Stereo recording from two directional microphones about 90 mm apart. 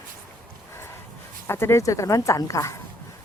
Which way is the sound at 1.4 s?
30° left (ahead or behind).